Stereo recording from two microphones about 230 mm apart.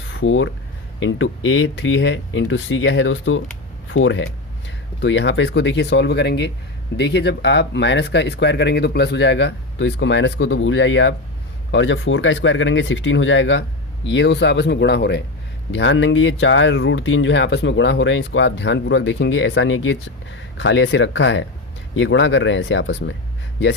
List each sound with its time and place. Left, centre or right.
0.1 s speech: left